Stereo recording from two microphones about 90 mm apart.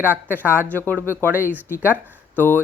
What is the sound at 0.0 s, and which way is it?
Speech, 25° left (ahead or behind).